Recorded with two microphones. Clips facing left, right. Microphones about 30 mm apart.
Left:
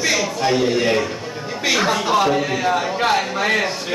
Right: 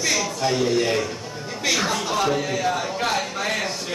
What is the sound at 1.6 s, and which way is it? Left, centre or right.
A man's voice, centre.